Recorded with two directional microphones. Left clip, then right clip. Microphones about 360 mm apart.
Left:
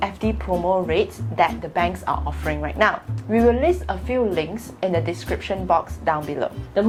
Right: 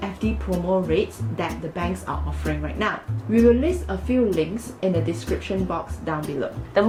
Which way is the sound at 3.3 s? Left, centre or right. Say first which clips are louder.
Left 1 dB; left.